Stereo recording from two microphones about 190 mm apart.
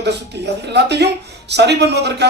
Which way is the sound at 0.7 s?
60° right (ahead or behind).